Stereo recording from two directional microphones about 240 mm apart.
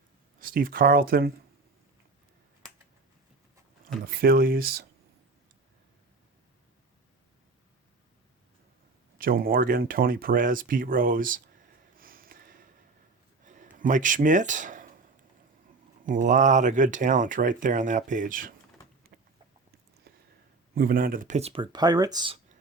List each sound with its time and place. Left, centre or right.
0.3 s speech: right
4.0 s speech: right
9.1 s speech: right
11.9 s a sound: right
16.0 s speech: right
19.1 s a sound: right
20.7 s speech: right; by 22.4 s centre